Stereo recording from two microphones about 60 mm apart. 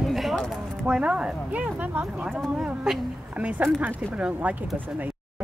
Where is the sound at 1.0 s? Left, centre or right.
Centre.